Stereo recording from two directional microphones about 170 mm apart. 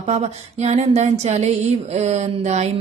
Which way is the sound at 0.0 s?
40° right (ahead or behind).